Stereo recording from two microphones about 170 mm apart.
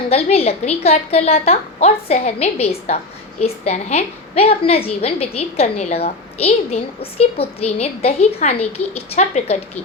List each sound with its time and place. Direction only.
0.1 s a woman's voice: 35° left (ahead or behind)